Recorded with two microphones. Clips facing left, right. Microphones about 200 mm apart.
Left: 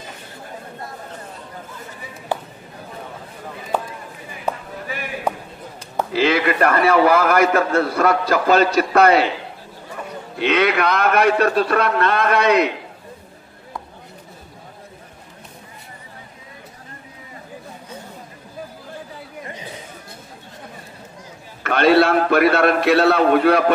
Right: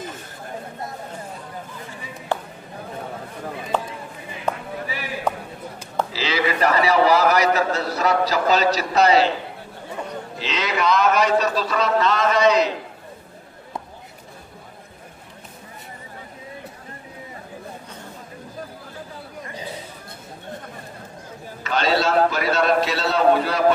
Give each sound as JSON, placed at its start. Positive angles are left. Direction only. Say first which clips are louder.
{"t": 5.3, "sound": "a sound", "louder": "left 1 dB", "side_deg": 10}
{"t": 6.1, "sound": "a man's voice", "louder": "left 7 dB", "side_deg": 55}
{"t": 10.4, "sound": "a man's voice", "louder": "left 6 dB", "side_deg": 60}
{"t": 21.6, "sound": "a man's voice", "louder": "left 6 dB", "side_deg": 60}